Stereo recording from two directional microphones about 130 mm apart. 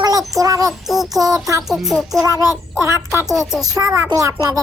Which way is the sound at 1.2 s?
25° right (ahead or behind).